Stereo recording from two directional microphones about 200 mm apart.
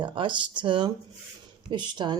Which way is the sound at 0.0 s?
25° right (ahead or behind).